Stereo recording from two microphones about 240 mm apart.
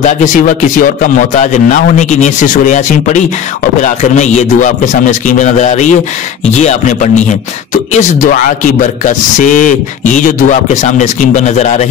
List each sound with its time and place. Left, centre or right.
0.7 s speech: left